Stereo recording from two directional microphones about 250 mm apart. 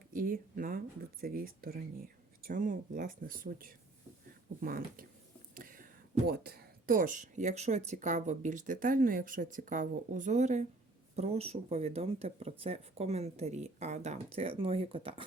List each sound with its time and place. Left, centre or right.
0.1 s speech: right